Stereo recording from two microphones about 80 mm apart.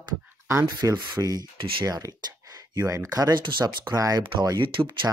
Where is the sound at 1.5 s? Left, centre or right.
Right.